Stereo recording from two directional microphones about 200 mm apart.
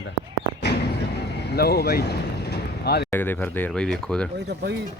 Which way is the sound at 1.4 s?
55° left (ahead or behind).